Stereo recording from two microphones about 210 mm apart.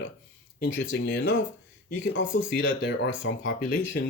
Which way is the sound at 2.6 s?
70° left (ahead or behind).